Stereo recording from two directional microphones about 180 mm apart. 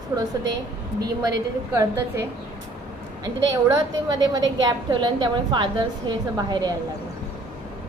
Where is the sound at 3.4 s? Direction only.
20° right (ahead or behind).